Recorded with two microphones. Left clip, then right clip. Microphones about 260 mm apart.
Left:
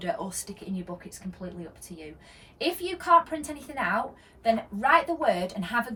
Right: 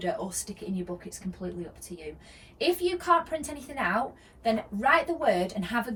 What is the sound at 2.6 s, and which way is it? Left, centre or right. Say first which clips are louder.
A woman's voice: right 3 dB; centre.